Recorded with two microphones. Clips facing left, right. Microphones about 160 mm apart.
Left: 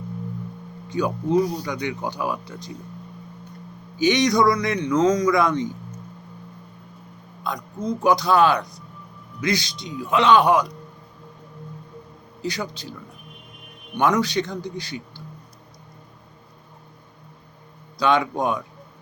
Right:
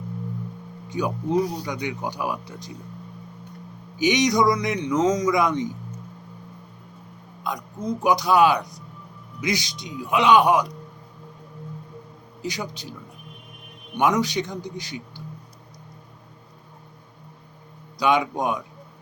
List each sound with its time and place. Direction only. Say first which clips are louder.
0.9 s speech: left 2 dB; 15° right (ahead or behind)
3.9 s speech: left 1 dB; 15° right (ahead or behind)
7.4 s speech: left 1 dB; 15° right (ahead or behind)
12.4 s speech: left 2 dB; 15° right (ahead or behind)
13.9 s speech: left 1 dB; 15° right (ahead or behind)
17.9 s speech: left 1 dB; 15° right (ahead or behind)